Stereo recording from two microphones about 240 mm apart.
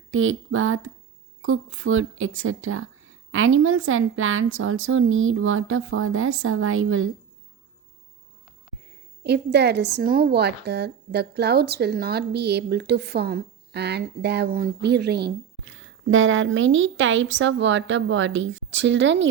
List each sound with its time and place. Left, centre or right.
0.1 s a woman's voice: right
9.2 s a woman's voice: right
15.7 s a woman's voice: right